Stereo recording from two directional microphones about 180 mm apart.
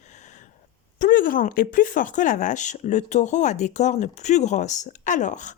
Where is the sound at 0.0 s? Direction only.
40° left (ahead or behind).